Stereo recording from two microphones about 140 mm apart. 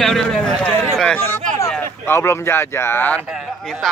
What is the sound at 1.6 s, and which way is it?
Speech, 20° left (ahead or behind).